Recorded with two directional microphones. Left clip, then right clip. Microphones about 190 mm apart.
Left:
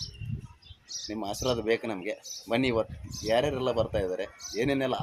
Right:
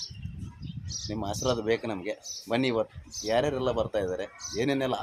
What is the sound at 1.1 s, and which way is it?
Speech, centre (ahead or behind).